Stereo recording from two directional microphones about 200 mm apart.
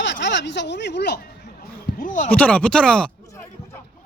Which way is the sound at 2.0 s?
40° left (ahead or behind).